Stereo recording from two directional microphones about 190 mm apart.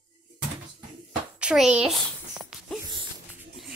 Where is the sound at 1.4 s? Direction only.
5° right (ahead or behind).